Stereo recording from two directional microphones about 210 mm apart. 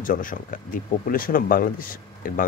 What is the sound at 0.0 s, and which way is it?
Speech, 40° left (ahead or behind).